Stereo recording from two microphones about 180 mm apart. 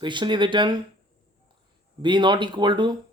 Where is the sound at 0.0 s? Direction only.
25° right (ahead or behind).